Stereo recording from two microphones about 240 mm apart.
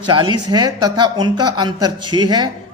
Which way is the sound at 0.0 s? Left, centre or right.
Centre.